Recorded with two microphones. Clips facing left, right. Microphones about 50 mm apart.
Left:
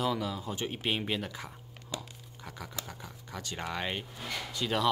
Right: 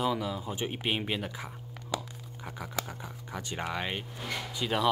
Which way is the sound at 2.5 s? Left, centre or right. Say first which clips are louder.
Right 5 dB; centre.